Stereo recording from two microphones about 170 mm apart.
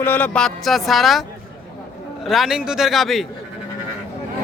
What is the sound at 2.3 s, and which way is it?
Speech, centre (ahead or behind).